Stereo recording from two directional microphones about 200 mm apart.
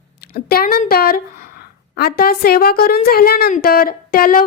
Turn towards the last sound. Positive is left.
turn(degrees=45)  # may be behind; listen again after turning